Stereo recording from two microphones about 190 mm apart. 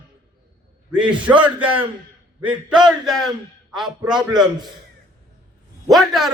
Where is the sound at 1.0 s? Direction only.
5° right (ahead or behind).